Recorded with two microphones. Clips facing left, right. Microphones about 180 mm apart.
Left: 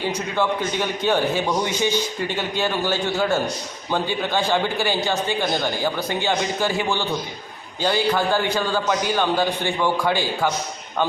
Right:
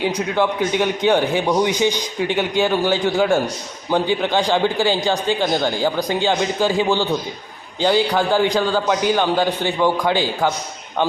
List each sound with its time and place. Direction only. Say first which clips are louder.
0.0 s a man's voice: right 4 dB; 10° right (ahead or behind)